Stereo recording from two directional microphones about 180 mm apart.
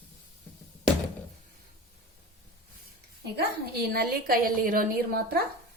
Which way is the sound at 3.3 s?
60° right (ahead or behind).